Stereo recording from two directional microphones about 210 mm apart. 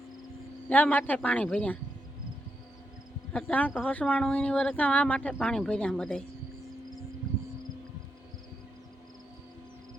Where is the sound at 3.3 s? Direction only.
5° left (ahead or behind).